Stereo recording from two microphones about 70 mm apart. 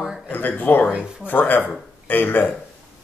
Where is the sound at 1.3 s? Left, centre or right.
Left.